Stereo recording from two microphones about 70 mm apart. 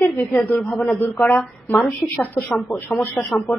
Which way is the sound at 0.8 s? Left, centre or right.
Left.